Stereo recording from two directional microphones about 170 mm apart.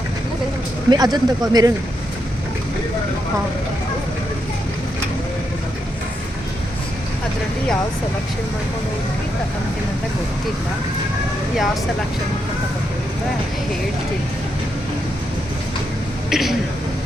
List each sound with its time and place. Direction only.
0.9 s speech: 25° right (ahead or behind)
11.5 s speech: centre (ahead or behind)
16.3 s speech: centre (ahead or behind)